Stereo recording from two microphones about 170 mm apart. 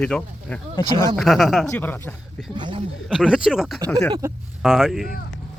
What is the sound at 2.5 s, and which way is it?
Speech, 25° right (ahead or behind).